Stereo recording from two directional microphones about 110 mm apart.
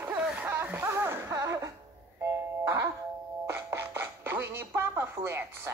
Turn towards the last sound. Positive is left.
turn(degrees=-20)  # may be behind; listen again after turning